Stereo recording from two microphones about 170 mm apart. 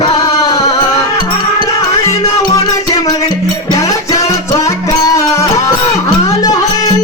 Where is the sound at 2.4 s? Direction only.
20° left (ahead or behind).